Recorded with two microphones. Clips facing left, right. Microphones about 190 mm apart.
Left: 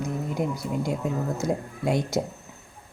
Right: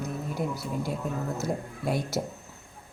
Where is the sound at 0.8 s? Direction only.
15° left (ahead or behind).